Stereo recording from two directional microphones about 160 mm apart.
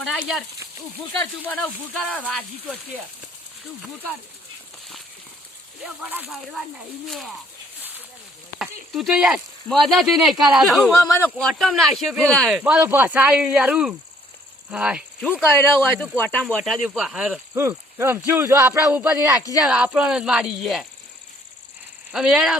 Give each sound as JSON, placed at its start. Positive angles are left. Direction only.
{"t": 0.0, "sound": "speech", "side_deg": 0}
{"t": 5.8, "sound": "speech", "side_deg": -10}
{"t": 8.9, "sound": "speech", "side_deg": 0}
{"t": 15.2, "sound": "speech", "side_deg": 15}
{"t": 16.6, "sound": "speech", "side_deg": -5}
{"t": 22.1, "sound": "speech", "side_deg": -5}